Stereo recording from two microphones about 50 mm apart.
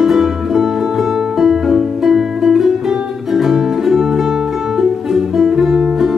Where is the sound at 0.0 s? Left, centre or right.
Centre.